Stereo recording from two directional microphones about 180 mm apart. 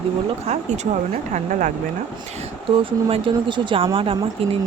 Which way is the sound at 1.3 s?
45° right (ahead or behind).